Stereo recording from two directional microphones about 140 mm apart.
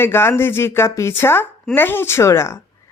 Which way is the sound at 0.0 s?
15° left (ahead or behind).